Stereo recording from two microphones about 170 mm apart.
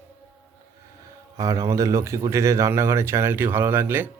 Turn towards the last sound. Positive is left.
turn(degrees=-10)  # may be behind; listen again after turning